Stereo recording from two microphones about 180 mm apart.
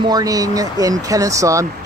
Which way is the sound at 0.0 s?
20° right (ahead or behind).